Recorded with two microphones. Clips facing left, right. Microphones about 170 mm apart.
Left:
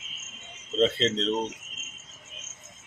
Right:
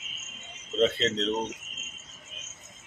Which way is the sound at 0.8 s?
30° left (ahead or behind).